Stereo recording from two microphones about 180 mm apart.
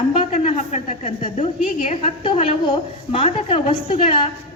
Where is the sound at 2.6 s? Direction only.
25° left (ahead or behind).